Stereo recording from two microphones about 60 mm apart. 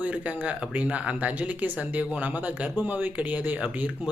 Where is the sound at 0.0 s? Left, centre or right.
Right.